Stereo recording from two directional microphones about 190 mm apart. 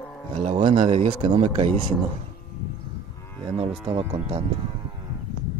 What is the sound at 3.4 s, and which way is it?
Speech, 30° right (ahead or behind).